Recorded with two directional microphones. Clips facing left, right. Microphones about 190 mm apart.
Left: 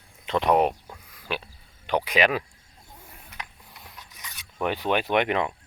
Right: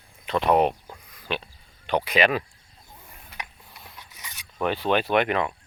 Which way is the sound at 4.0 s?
10° right (ahead or behind).